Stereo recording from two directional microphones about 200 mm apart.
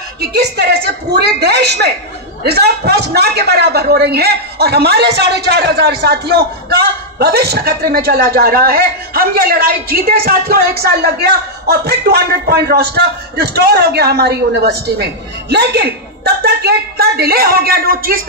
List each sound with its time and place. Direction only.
0.2 s a man's voice: 55° right (ahead or behind)